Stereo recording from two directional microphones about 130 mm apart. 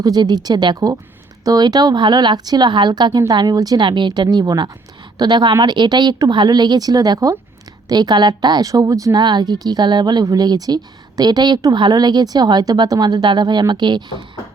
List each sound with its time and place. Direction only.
0.0 s speech: 30° right (ahead or behind)